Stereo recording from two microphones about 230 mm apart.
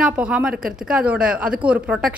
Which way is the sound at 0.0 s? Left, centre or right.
Centre.